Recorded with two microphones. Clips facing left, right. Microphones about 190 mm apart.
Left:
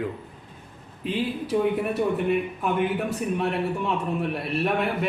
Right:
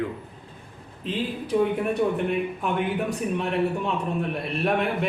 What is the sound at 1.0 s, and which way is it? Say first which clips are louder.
Speech: left 2 dB; 5° left (ahead or behind).